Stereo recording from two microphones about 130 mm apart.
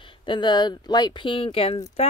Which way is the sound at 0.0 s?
40° left (ahead or behind).